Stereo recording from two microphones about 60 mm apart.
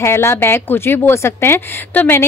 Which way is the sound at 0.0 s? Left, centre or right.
Left.